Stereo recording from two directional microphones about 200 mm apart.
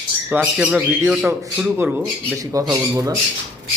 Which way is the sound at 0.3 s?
5° right (ahead or behind).